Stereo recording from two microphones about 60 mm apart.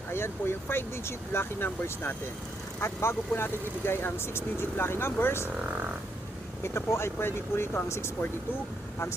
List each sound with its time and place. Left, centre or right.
0.1 s speech: left
6.6 s speech: left